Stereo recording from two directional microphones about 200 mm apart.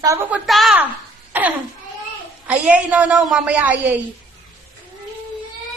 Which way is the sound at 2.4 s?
5° right (ahead or behind).